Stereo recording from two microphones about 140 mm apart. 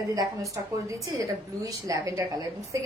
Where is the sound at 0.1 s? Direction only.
25° right (ahead or behind).